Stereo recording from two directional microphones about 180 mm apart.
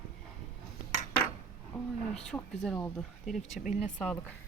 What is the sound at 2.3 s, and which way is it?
Speech, 5° left (ahead or behind).